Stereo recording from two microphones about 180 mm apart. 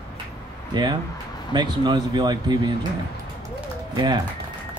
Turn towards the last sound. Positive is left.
turn(degrees=-25)  # may be behind; listen again after turning